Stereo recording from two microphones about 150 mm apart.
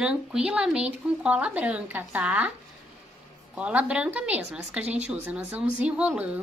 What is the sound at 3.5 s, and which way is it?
A woman's voice, 10° right (ahead or behind).